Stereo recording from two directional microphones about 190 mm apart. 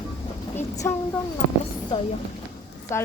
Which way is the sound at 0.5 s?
15° left (ahead or behind).